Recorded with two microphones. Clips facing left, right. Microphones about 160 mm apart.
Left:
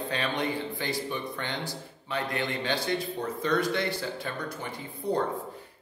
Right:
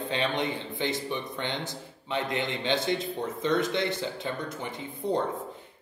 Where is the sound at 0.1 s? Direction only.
20° right (ahead or behind).